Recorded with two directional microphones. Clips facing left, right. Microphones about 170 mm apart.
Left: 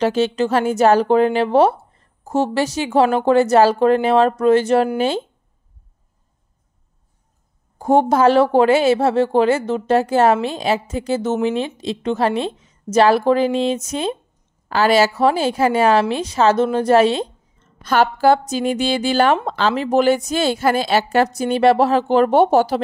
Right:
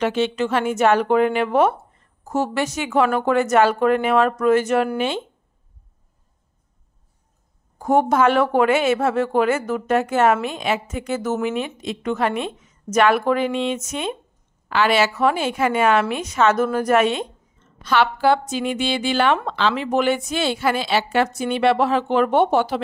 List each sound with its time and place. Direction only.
0.0 s a woman's voice: 35° left (ahead or behind)
7.8 s a woman's voice: 30° left (ahead or behind)
17.8 s a woman's voice: 40° left (ahead or behind)